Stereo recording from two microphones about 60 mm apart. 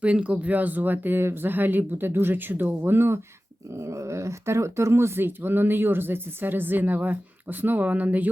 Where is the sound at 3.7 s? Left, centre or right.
Right.